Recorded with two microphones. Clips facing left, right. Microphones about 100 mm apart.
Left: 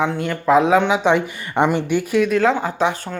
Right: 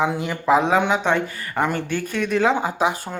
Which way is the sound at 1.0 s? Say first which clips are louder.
Left 4 dB; 15° left (ahead or behind).